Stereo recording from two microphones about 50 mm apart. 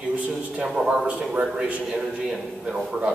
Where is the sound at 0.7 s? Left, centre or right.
Centre.